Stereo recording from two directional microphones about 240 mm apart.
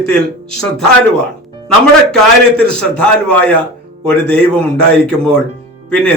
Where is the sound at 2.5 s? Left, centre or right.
Centre.